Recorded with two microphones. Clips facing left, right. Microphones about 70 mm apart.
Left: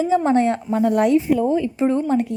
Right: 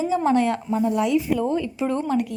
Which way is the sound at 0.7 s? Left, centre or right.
Left.